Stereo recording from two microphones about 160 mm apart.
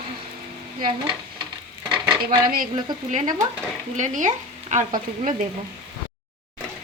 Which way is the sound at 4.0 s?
50° right (ahead or behind).